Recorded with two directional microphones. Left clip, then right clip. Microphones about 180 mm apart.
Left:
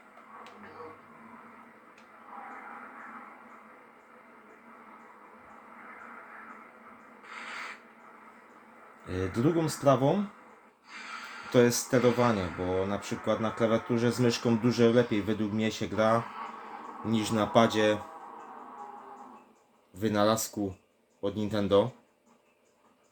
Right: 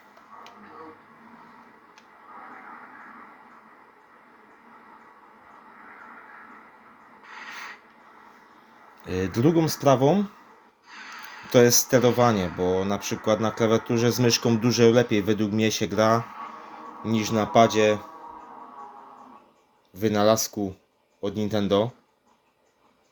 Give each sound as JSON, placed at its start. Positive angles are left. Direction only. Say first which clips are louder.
{"t": 9.0, "sound": "speech", "louder": "right 6 dB", "side_deg": -60}
{"t": 11.4, "sound": "speech", "louder": "right 6 dB", "side_deg": -60}
{"t": 17.1, "sound": "speech", "louder": "right 5 dB", "side_deg": -35}
{"t": 20.0, "sound": "speech", "louder": "right 6 dB", "side_deg": -40}